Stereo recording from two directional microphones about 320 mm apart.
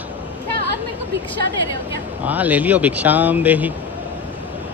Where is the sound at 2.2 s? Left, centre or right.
Centre.